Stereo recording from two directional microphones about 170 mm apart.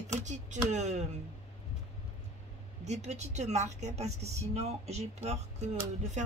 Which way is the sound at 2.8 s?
40° right (ahead or behind).